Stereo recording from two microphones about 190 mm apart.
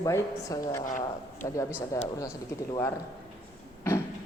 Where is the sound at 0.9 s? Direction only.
40° left (ahead or behind).